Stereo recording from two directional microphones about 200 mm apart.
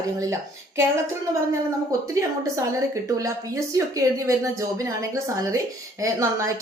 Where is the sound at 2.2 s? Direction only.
15° right (ahead or behind).